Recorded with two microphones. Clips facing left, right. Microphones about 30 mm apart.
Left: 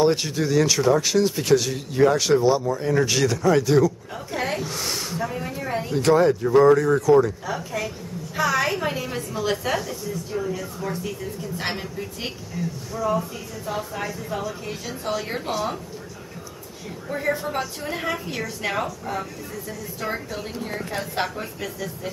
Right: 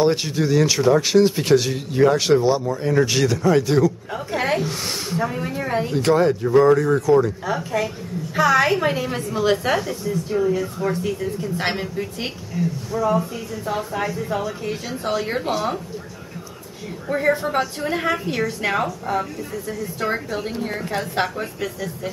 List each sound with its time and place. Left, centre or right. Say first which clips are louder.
0.0 s speech: right 1 dB; centre
17.1 s speech: right 5 dB; centre